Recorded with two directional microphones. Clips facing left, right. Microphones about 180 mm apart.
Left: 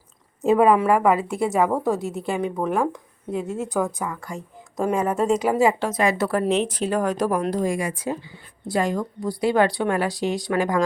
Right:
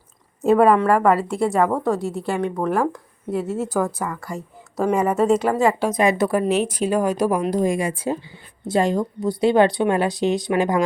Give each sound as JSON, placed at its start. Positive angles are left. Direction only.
{"t": 0.4, "sound": "speech", "side_deg": 0}
{"t": 5.8, "sound": "speech", "side_deg": -15}